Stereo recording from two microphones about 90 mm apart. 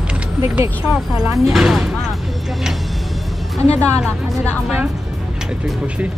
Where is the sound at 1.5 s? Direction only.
5° right (ahead or behind).